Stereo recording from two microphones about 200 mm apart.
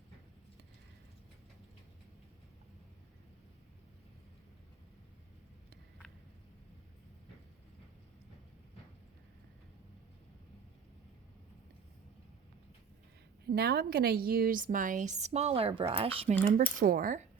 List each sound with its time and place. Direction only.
13.4 s a woman's voice: 55° right (ahead or behind)